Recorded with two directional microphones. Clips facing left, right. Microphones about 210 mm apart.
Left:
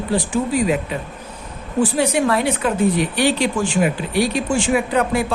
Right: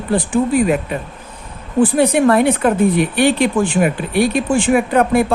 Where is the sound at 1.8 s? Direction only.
55° right (ahead or behind).